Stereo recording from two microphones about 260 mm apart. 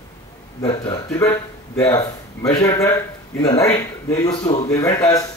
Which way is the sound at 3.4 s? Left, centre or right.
Left.